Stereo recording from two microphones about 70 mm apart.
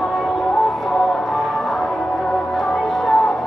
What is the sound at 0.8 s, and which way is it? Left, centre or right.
Music, centre.